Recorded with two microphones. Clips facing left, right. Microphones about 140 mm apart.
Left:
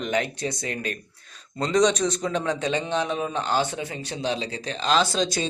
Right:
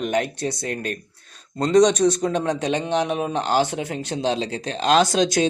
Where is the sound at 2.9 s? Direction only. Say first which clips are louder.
Right 3 dB; 60° right (ahead or behind).